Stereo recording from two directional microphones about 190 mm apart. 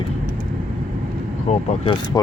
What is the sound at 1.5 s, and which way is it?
Speech, 35° left (ahead or behind).